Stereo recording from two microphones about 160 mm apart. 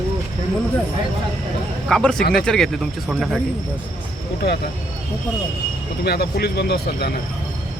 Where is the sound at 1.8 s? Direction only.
5° left (ahead or behind).